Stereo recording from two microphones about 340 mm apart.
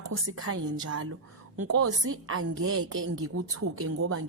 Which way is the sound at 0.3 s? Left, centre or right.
Right.